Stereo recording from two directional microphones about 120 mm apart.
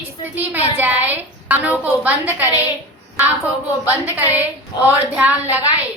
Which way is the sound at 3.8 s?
15° right (ahead or behind).